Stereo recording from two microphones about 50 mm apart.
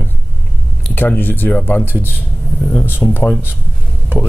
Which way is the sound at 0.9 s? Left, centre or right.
Left.